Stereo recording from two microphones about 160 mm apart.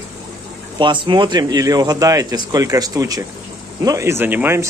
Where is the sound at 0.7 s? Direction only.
30° right (ahead or behind).